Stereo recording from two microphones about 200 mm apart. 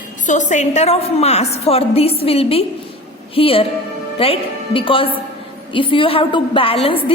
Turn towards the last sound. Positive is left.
turn(degrees=30)  # may be behind; listen again after turning